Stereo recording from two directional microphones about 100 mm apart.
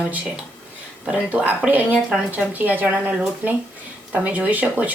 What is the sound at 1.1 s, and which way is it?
Speech, 15° right (ahead or behind).